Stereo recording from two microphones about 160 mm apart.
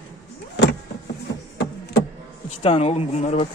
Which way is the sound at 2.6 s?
40° left (ahead or behind).